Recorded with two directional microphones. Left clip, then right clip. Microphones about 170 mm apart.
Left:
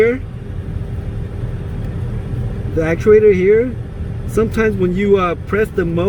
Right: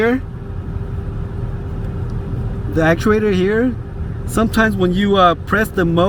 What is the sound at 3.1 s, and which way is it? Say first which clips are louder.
Speech: left 6 dB; 90° right.